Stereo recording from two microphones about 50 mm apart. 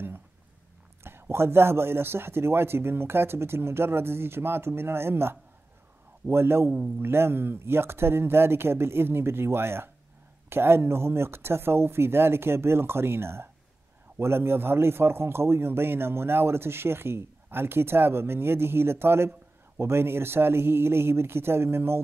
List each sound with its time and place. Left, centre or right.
1.0 s a man's voice: right